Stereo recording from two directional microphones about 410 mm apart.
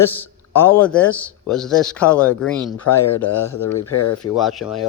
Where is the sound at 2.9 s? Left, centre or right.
Left.